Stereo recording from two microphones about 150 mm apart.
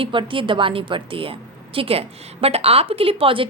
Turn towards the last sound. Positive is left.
turn(degrees=-35)  # may be behind; listen again after turning